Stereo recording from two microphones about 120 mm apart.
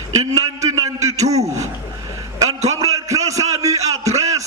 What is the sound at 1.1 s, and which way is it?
Speech, 65° right (ahead or behind).